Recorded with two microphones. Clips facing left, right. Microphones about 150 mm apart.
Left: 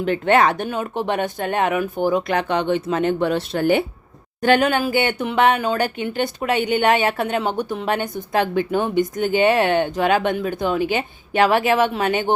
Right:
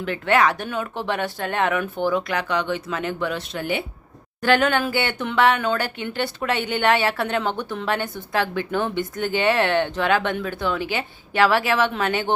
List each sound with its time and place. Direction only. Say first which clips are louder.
0.0 s a woman's voice: left 3 dB; 25° left (ahead or behind)
4.4 s a woman's voice: left 2 dB; 20° left (ahead or behind)